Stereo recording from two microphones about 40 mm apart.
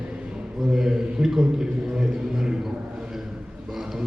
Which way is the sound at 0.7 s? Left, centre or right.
Centre.